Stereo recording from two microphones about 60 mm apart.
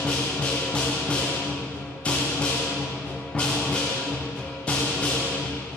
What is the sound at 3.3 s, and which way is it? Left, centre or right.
Music, centre.